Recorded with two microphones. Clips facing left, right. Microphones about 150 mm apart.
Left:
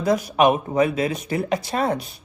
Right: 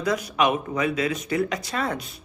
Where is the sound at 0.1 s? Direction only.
45° left (ahead or behind); by 1.7 s 30° left (ahead or behind).